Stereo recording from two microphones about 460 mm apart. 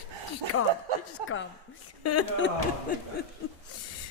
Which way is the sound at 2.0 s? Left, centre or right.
Left.